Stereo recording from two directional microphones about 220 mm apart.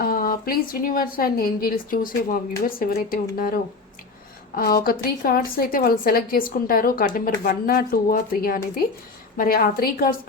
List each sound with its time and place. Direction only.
0.0 s a woman's voice: 40° left (ahead or behind)